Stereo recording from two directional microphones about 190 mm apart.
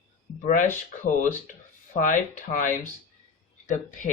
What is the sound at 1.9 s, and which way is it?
Speech, 40° left (ahead or behind).